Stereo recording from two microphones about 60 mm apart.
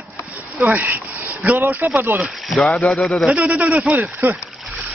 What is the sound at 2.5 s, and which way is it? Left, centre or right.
Speech, centre.